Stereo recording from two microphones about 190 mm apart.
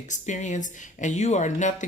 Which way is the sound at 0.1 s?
40° left (ahead or behind).